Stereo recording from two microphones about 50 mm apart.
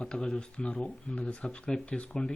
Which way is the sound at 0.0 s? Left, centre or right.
Centre.